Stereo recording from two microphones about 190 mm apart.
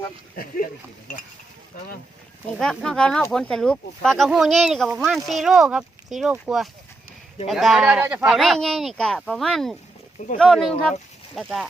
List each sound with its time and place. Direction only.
0.3 s speech: 50° left (ahead or behind)
2.6 s speech: 5° left (ahead or behind)